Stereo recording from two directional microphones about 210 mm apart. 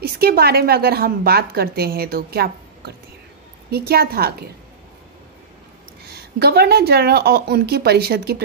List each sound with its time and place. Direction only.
0.0 s a woman's voice: 45° right (ahead or behind)
6.0 s a woman's voice: 50° right (ahead or behind)